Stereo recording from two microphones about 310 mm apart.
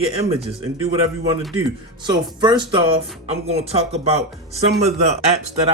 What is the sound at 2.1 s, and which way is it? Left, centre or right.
Speech, centre.